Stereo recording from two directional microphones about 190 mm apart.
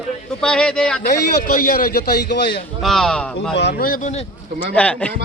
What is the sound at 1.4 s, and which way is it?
A man's voice, 45° left (ahead or behind).